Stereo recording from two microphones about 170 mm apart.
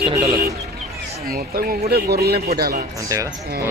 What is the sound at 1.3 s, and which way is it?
A man's voice, 60° right (ahead or behind).